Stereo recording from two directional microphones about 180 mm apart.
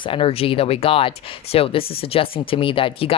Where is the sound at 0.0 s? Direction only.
30° left (ahead or behind).